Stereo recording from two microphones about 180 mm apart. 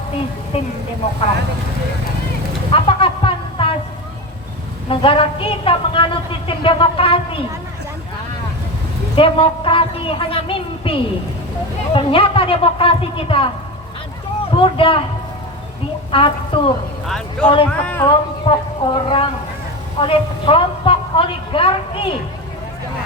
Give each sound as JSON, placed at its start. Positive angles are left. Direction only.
{"t": 0.5, "sound": "speech", "side_deg": 30}
{"t": 2.7, "sound": "speech", "side_deg": 30}
{"t": 4.9, "sound": "a woman's voice", "side_deg": 30}
{"t": 9.1, "sound": "a woman's voice", "side_deg": 30}
{"t": 14.5, "sound": "a woman's voice", "side_deg": 30}
{"t": 16.1, "sound": "a woman's voice", "side_deg": 30}
{"t": 17.1, "sound": "speech", "side_deg": 5}
{"t": 18.4, "sound": "a woman's voice", "side_deg": 30}